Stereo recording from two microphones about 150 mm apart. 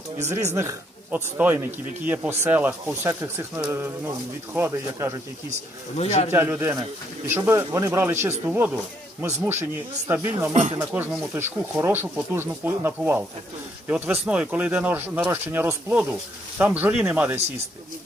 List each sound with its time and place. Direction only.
0.2 s speech: 15° right (ahead or behind)
6.0 s speech: 45° left (ahead or behind)
6.3 s speech: 15° right (ahead or behind)
10.1 s speech: 15° right (ahead or behind)
10.5 s speech: 50° right (ahead or behind)
10.8 s speech: 15° right (ahead or behind)